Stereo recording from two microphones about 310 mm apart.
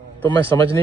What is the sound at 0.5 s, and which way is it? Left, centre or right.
Speech, centre.